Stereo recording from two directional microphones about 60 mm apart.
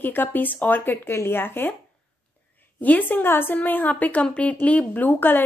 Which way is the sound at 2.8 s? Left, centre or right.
Left.